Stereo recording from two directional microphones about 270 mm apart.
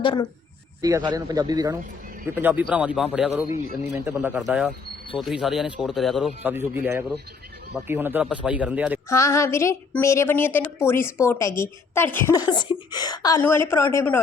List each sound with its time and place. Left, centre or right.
0.0 s a woman's voice: centre
0.8 s a man's voice: centre
9.0 s a woman's voice: centre